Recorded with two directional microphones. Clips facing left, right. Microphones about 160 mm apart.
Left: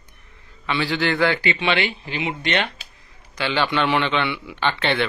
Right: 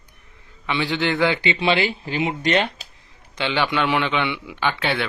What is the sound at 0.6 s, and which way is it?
Speech, 20° right (ahead or behind).